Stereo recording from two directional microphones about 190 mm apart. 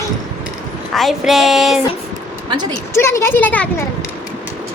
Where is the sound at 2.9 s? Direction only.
15° left (ahead or behind).